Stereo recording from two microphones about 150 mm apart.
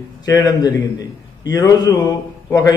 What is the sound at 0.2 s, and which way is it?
A man's voice, 25° left (ahead or behind).